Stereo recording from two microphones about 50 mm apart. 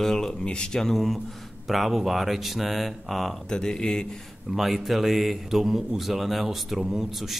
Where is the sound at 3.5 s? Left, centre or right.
Centre.